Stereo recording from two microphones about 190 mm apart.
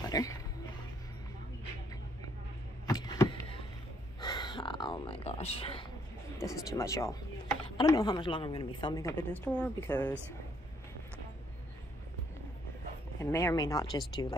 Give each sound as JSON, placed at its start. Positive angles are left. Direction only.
{"t": 0.0, "sound": "music", "side_deg": 20}
{"t": 2.9, "sound": "vehicle", "side_deg": 20}
{"t": 4.2, "sound": "a sound", "side_deg": 25}
{"t": 6.3, "sound": "a woman's voice", "side_deg": 15}
{"t": 13.2, "sound": "a woman's voice", "side_deg": 15}